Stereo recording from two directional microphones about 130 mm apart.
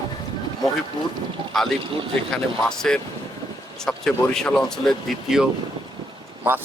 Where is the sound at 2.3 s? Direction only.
5° left (ahead or behind).